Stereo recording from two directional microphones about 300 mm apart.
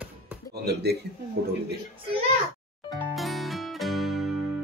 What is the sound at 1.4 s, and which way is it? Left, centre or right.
Speech, right.